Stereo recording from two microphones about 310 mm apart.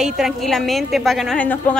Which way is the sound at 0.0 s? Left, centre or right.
Centre.